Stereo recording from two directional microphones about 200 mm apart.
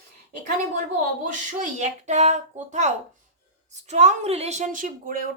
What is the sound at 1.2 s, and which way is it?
A woman's voice, 40° right (ahead or behind).